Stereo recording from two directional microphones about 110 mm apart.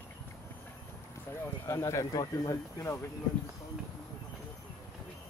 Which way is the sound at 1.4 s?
30° left (ahead or behind).